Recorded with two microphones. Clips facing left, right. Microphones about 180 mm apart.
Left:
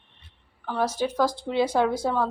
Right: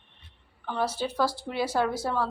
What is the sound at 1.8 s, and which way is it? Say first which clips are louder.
Speech: left 4 dB; 20° left (ahead or behind).